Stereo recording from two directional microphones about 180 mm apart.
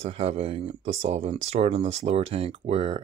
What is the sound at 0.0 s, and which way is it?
Speech, 35° right (ahead or behind).